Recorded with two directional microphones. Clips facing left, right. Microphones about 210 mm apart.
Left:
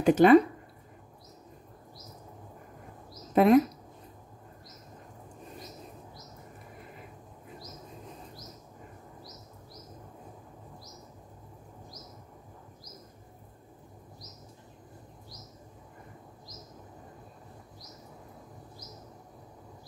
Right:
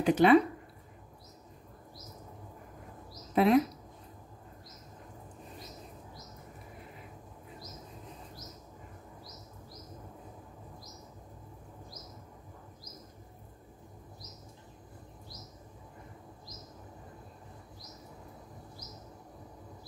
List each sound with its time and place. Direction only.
0.0 s speech: 45° left (ahead or behind)
3.3 s speech: 50° left (ahead or behind)